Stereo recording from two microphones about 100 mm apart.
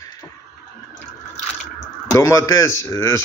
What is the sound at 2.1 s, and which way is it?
Speech, 30° left (ahead or behind).